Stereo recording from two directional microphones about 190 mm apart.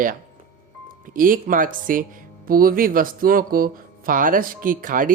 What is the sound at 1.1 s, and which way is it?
Speech, 45° right (ahead or behind).